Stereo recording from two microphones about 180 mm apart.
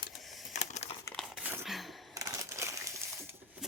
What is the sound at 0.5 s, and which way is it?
Crumpling, 40° left (ahead or behind).